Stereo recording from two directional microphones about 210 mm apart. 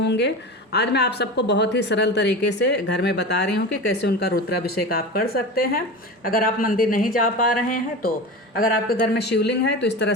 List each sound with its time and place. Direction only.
0.0 s speech: 55° left (ahead or behind)
8.5 s speech: 45° left (ahead or behind)